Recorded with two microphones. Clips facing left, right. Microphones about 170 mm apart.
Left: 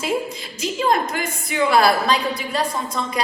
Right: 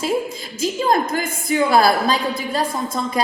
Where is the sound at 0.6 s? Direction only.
40° right (ahead or behind).